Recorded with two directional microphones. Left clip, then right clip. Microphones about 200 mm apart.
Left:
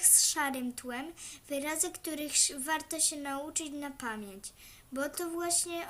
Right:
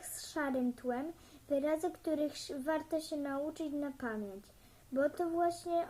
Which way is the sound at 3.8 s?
35° left (ahead or behind).